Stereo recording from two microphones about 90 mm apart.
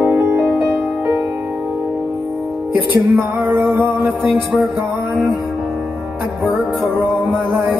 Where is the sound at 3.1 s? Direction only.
25° right (ahead or behind).